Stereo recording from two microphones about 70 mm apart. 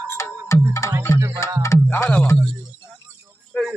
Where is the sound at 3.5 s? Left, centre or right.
Centre.